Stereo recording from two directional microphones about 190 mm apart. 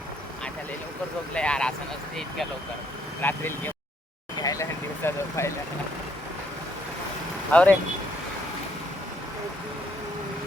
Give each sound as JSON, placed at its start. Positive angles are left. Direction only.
{"t": 1.3, "sound": "speech", "side_deg": 5}
{"t": 3.2, "sound": "speech", "side_deg": 10}
{"t": 4.4, "sound": "vehicle", "side_deg": 20}
{"t": 5.0, "sound": "speech", "side_deg": 10}
{"t": 7.5, "sound": "speech", "side_deg": 5}